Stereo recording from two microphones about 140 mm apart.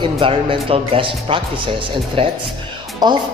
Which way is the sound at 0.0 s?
40° right (ahead or behind).